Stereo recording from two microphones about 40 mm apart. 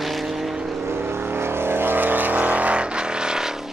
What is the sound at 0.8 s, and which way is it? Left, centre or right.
Vehicle, right.